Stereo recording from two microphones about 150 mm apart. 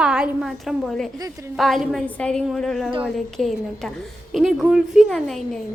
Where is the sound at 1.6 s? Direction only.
Centre (ahead or behind).